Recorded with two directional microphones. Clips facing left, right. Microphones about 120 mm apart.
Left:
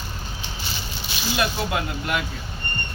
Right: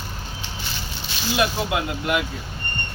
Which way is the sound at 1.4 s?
10° right (ahead or behind).